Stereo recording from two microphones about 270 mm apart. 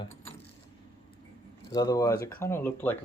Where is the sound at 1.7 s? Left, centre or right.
Centre.